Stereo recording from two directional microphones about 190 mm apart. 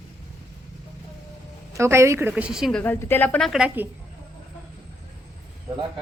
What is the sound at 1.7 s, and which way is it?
A woman's voice, 15° right (ahead or behind).